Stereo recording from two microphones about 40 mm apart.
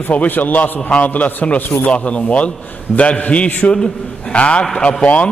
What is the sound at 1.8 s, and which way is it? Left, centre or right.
A man's voice, left.